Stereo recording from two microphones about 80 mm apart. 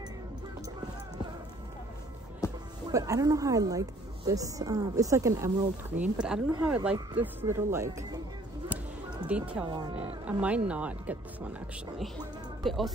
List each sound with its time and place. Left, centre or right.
2.4 s music: left
2.9 s a woman's voice: right
6.2 s speech: centre
7.4 s speech: right
8.6 s a sound: centre
9.7 s speech: right
9.9 s speech: centre
12.6 s speech: centre